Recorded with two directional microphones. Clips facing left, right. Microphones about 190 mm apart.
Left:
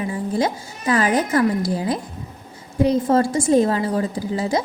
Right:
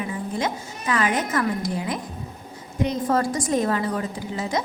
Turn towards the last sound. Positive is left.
turn(degrees=35)  # may be behind; listen again after turning